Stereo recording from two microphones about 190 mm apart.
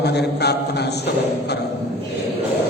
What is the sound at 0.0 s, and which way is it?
A man's voice, 60° left (ahead or behind).